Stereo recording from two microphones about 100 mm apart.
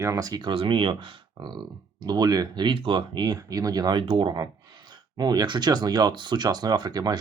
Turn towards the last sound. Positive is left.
turn(degrees=-40)  # may be behind; listen again after turning